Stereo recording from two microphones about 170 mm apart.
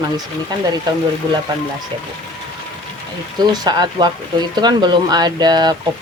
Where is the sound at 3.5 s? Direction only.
25° right (ahead or behind).